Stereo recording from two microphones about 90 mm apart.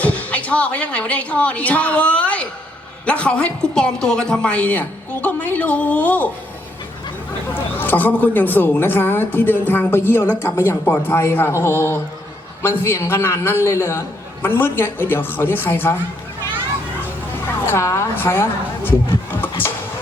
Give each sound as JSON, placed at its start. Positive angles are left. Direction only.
{"t": 0.0, "sound": "a woman's voice", "side_deg": 15}
{"t": 7.5, "sound": "a woman's voice", "side_deg": 20}
{"t": 17.0, "sound": "a sound", "side_deg": 25}
{"t": 19.3, "sound": "vehicle", "side_deg": 25}